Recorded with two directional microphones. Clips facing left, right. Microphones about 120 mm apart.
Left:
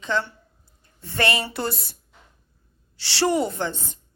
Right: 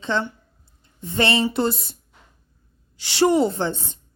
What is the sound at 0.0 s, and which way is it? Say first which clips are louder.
Speech: right 2 dB; 30° right (ahead or behind).